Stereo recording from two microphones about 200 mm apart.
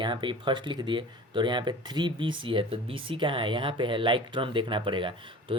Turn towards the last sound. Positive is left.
turn(degrees=-25)  # may be behind; listen again after turning